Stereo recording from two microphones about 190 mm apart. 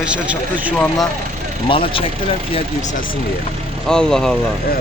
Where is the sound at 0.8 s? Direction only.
15° left (ahead or behind).